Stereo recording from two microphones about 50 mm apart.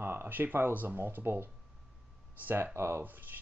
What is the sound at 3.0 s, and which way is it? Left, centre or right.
Speech, right.